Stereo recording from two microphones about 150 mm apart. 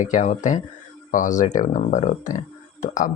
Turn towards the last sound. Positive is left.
turn(degrees=55)  # may be behind; listen again after turning